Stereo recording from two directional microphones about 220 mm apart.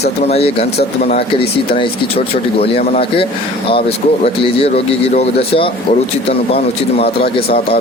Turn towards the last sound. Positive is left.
turn(degrees=25)  # may be behind; listen again after turning